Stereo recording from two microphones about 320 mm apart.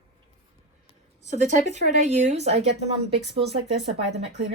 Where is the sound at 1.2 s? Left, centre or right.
Right.